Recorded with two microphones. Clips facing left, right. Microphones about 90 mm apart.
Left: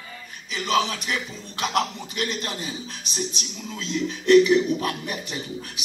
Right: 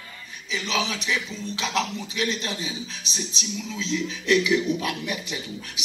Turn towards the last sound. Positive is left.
turn(degrees=45)  # may be behind; listen again after turning